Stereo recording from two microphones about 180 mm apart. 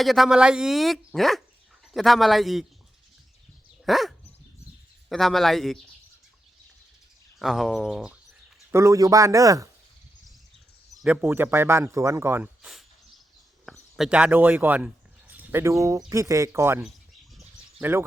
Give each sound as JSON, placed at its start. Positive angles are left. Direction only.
{"t": 0.0, "sound": "speech", "side_deg": 0}
{"t": 3.8, "sound": "speech", "side_deg": 0}
{"t": 7.3, "sound": "speech", "side_deg": 0}
{"t": 8.7, "sound": "speech", "side_deg": -15}
{"t": 10.9, "sound": "speech", "side_deg": -5}
{"t": 17.3, "sound": "bird", "side_deg": -5}